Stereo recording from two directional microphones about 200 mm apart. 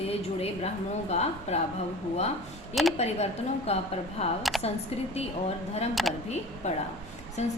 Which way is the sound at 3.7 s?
30° left (ahead or behind).